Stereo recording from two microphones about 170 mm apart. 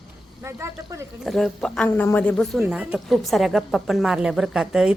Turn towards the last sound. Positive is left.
turn(degrees=-5)  # may be behind; listen again after turning